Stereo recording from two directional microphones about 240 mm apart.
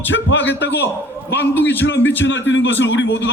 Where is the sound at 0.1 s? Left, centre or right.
Left.